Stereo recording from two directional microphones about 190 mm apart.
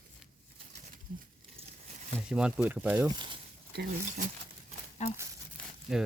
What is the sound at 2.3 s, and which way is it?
Speech, 5° right (ahead or behind).